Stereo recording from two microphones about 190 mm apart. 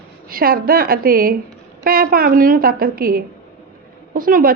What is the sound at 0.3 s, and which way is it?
A woman's voice, 50° right (ahead or behind).